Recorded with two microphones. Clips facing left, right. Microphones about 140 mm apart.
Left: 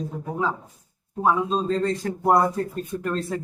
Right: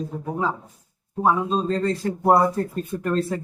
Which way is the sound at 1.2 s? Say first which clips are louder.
Right 1 dB; centre (ahead or behind).